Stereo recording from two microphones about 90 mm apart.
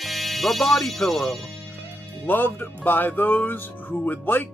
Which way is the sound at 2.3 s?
20° left (ahead or behind).